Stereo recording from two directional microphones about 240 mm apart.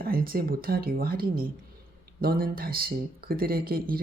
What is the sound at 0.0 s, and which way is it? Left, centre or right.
Speech, right.